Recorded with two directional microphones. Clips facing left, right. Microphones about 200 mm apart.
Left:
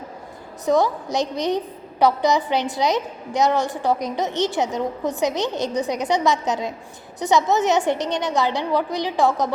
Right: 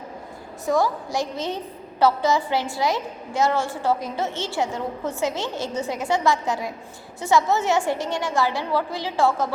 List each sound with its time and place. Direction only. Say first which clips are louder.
0.6 s a woman's voice: left 3 dB; 20° left (ahead or behind)